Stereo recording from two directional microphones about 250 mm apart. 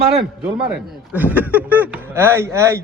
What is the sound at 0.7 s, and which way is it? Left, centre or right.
Speech, centre.